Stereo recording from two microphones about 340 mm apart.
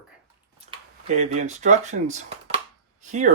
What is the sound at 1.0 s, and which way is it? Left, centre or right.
Speech, centre.